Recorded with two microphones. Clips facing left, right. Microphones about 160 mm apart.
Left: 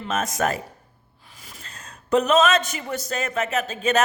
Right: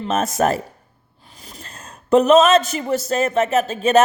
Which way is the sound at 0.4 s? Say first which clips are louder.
Right 6 dB; 40° right (ahead or behind).